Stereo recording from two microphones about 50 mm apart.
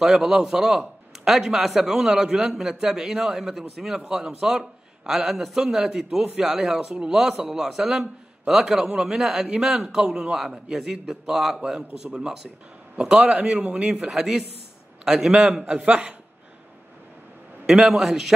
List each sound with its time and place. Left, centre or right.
0.0 s a man's voice: centre; by 14.0 s right
14.0 s a man's voice: centre
15.7 s a man's voice: right
17.6 s a man's voice: centre